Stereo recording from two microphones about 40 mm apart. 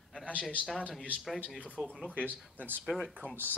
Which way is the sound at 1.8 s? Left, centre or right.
Right.